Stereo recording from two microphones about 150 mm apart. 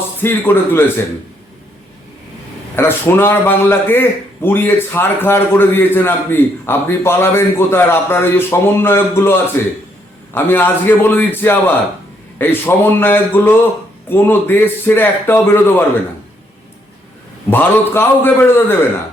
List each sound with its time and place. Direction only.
0.2 s a man's voice: 15° left (ahead or behind)
2.7 s a man's voice: 15° left (ahead or behind)
17.5 s a man's voice: 15° left (ahead or behind)